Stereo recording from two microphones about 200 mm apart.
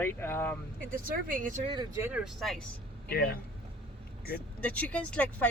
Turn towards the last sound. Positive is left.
turn(degrees=5)  # may be behind; listen again after turning